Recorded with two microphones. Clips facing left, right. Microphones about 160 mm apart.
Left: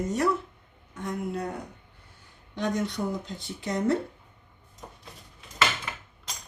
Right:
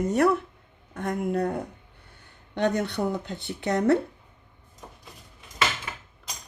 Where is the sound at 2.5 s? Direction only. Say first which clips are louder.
Right 4 dB; 65° right (ahead or behind).